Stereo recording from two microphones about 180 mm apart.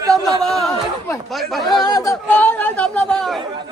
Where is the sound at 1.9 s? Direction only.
20° left (ahead or behind).